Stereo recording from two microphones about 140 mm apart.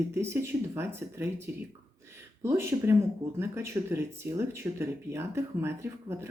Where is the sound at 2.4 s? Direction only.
20° right (ahead or behind).